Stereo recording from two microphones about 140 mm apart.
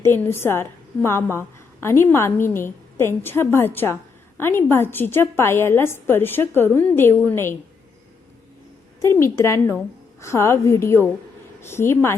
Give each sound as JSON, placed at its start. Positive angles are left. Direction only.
{"t": 0.0, "sound": "a woman's voice", "side_deg": 15}
{"t": 9.0, "sound": "a woman's voice", "side_deg": 20}